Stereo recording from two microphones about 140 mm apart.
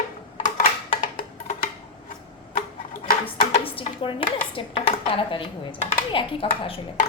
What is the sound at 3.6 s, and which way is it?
A woman's voice, 40° left (ahead or behind).